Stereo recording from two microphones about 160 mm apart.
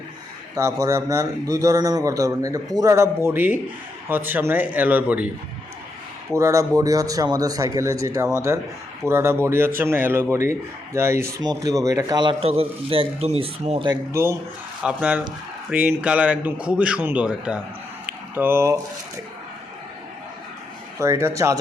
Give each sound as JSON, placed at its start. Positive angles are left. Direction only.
{"t": 0.5, "sound": "speech", "side_deg": -20}
{"t": 6.3, "sound": "speech", "side_deg": -20}
{"t": 18.0, "sound": "a sound", "side_deg": -15}
{"t": 21.0, "sound": "speech", "side_deg": -15}